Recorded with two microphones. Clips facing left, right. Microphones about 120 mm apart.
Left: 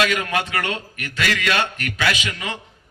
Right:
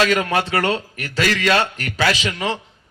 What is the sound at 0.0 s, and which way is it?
A man's voice, 35° right (ahead or behind).